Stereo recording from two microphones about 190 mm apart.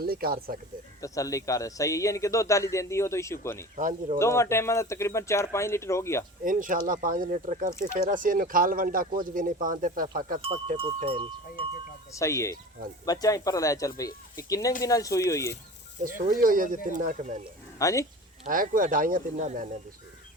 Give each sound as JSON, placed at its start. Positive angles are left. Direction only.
{"t": 0.0, "sound": "speech", "side_deg": -50}
{"t": 1.0, "sound": "a man's voice", "side_deg": 15}
{"t": 3.8, "sound": "speech", "side_deg": -45}
{"t": 4.2, "sound": "a man's voice", "side_deg": 15}
{"t": 6.4, "sound": "speech", "side_deg": -45}
{"t": 10.8, "sound": "speech", "side_deg": -30}
{"t": 12.1, "sound": "a man's voice", "side_deg": 15}
{"t": 16.3, "sound": "speech", "side_deg": -45}
{"t": 17.7, "sound": "speech", "side_deg": 15}
{"t": 18.4, "sound": "speech", "side_deg": -45}